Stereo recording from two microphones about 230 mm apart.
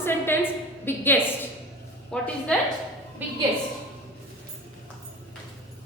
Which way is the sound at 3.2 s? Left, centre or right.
Centre.